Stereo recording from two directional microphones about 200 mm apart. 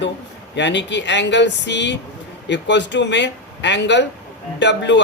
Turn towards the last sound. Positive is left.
turn(degrees=60)  # may be behind; listen again after turning